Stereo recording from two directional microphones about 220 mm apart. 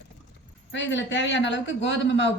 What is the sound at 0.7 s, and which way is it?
A woman's voice, 55° left (ahead or behind).